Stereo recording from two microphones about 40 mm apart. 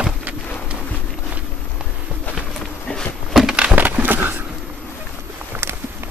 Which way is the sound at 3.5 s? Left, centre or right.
Right.